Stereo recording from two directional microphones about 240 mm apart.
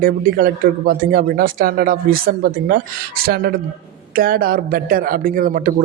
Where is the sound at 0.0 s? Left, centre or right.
Right.